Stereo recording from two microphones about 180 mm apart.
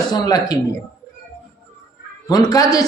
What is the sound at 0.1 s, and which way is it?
Speech, 20° left (ahead or behind).